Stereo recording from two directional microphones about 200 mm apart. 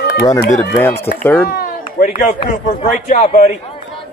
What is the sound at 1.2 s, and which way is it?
Speech, 10° left (ahead or behind).